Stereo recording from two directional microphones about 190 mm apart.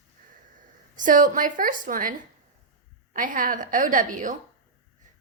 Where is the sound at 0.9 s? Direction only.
45° right (ahead or behind).